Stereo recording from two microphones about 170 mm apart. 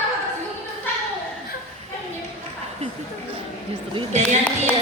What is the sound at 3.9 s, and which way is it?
Basketball bounce, 40° right (ahead or behind).